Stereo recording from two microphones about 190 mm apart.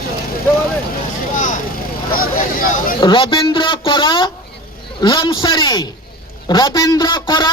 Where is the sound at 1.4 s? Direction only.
40° left (ahead or behind).